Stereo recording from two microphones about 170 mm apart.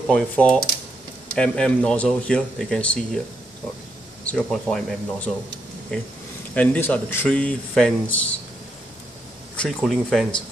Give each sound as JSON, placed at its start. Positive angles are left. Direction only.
{"t": 0.1, "sound": "speech", "side_deg": 5}
{"t": 4.2, "sound": "speech", "side_deg": 5}
{"t": 9.6, "sound": "speech", "side_deg": 0}